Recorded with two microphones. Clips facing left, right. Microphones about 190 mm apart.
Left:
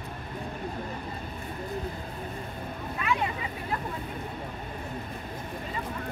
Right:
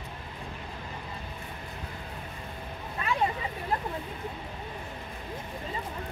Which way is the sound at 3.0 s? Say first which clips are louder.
Right 1 dB; 35° right (ahead or behind).